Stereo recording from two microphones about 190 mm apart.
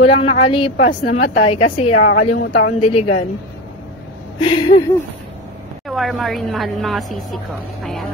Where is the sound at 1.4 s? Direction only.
30° left (ahead or behind).